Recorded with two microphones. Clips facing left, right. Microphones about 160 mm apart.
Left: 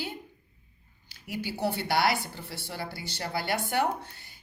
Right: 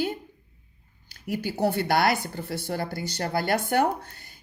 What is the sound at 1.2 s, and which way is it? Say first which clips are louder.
A woman's voice: right 5 dB; 45° right (ahead or behind).